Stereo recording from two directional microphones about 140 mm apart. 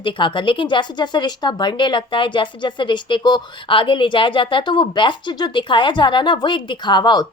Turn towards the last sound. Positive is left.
turn(degrees=30)  # may be behind; listen again after turning